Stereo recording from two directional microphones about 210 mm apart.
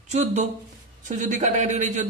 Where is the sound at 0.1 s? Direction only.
35° right (ahead or behind).